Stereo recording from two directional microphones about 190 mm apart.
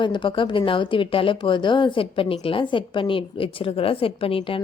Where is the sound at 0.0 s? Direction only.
25° left (ahead or behind).